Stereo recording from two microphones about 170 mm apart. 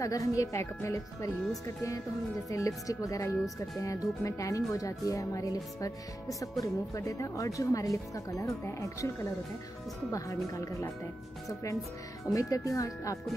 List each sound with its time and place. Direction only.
0.0 s speech: 20° left (ahead or behind)
2.5 s speech: 20° left (ahead or behind)
10.1 s speech: 20° left (ahead or behind)